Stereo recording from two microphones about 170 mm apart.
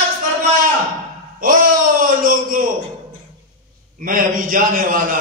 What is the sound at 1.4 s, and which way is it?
Speech, 55° right (ahead or behind).